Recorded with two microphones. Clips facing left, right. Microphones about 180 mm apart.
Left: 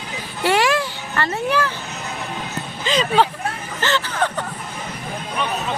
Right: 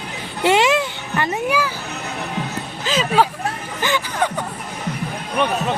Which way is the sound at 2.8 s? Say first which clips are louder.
Even; 5° right (ahead or behind).